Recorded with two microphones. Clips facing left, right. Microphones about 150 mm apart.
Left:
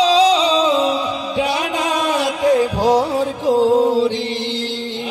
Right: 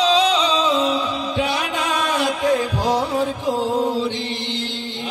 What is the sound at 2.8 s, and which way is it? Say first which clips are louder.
Music: left 2 dB; 40° left (ahead or behind).